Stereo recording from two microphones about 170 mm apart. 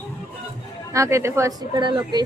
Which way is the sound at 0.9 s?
15° right (ahead or behind).